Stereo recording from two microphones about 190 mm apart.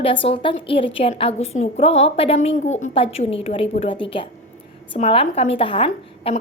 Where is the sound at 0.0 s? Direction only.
30° left (ahead or behind).